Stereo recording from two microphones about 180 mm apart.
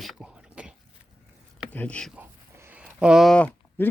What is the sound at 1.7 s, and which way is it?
Speech, 10° left (ahead or behind).